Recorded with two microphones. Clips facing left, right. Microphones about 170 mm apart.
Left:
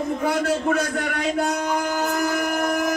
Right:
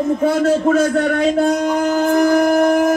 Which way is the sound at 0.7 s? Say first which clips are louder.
Right 9 dB; 45° right (ahead or behind).